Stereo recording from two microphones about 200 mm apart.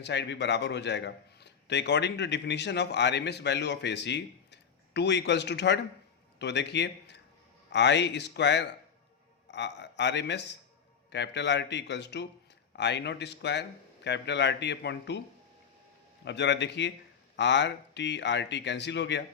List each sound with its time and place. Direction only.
0.0 s a man's voice: 60° left (ahead or behind)
16.2 s a man's voice: 60° left (ahead or behind)